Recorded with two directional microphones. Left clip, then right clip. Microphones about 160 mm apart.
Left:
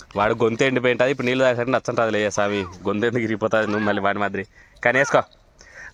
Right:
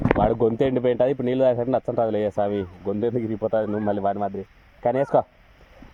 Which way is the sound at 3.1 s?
35° left (ahead or behind).